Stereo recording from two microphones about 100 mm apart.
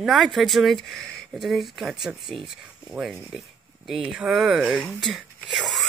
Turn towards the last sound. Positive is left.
turn(degrees=0)  # may be behind; listen again after turning